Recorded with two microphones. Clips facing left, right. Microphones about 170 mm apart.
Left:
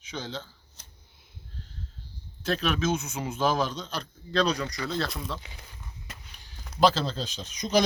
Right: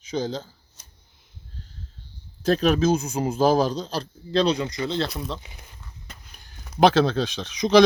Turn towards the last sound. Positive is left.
turn(degrees=-85)